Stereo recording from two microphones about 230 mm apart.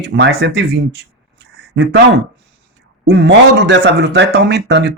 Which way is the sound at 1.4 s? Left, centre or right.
Right.